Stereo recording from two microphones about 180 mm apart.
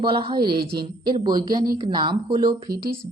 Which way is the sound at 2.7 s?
60° right (ahead or behind).